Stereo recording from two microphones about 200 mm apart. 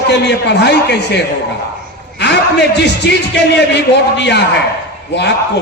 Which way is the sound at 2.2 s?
60° left (ahead or behind).